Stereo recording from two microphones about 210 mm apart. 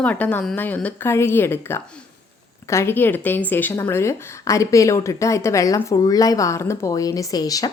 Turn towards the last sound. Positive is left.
turn(degrees=15)  # may be behind; listen again after turning